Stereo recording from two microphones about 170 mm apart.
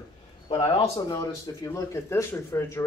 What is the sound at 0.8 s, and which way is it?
A man's voice, 20° left (ahead or behind).